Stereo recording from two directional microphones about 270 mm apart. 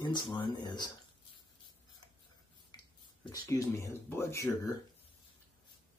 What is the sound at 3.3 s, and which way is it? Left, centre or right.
Speech, centre.